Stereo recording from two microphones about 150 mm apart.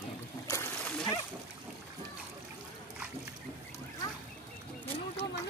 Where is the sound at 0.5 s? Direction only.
15° left (ahead or behind).